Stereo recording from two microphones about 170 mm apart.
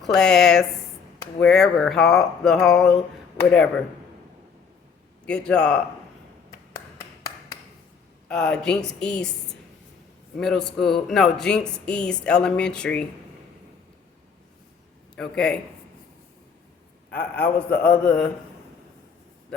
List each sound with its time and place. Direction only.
0.0 s speech: 5° left (ahead or behind)
5.2 s a man's voice: 5° left (ahead or behind)
6.7 s finger snapping: 15° left (ahead or behind)
8.3 s speech: 5° left (ahead or behind)
15.1 s a man's voice: 5° left (ahead or behind)
17.1 s a man's voice: 10° left (ahead or behind)